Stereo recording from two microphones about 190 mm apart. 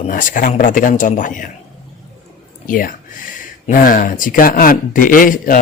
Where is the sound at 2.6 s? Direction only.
45° left (ahead or behind).